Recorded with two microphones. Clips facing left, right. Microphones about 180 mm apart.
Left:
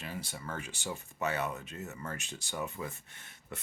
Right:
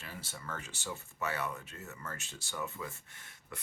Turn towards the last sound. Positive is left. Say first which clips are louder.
# left 3 dB
turn(degrees=25)  # may be behind; listen again after turning